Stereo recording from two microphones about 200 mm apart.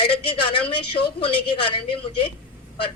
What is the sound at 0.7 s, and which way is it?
A man's voice, 25° left (ahead or behind).